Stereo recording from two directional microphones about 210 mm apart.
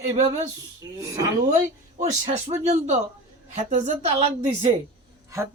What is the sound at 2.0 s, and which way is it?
A woman's voice, 30° right (ahead or behind).